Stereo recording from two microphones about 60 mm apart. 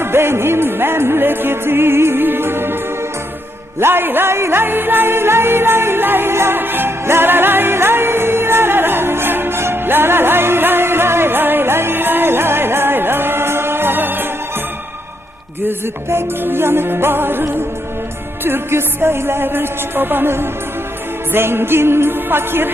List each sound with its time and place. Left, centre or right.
0.0 s music: right
3.8 s music: right
16.0 s music: right